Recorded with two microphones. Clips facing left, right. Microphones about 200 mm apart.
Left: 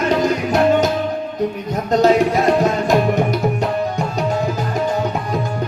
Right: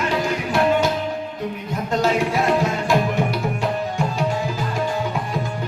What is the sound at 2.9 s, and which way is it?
Tabla, 40° left (ahead or behind).